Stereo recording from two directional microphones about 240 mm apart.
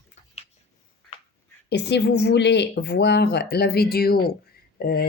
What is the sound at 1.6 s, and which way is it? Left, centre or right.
A woman's voice, left.